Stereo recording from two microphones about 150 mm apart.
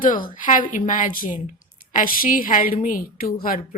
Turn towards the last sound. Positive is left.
turn(degrees=70)  # may be behind; listen again after turning